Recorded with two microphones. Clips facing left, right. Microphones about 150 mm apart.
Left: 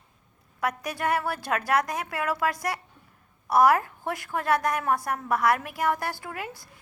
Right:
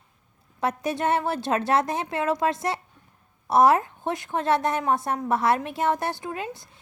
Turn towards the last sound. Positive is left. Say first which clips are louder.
# right 4 dB
turn(degrees=-20)  # may be behind; listen again after turning